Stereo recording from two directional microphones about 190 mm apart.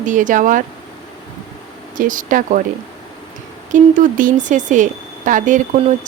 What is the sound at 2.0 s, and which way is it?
Speech, 45° right (ahead or behind).